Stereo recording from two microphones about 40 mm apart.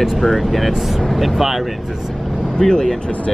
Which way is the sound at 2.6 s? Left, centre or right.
Left.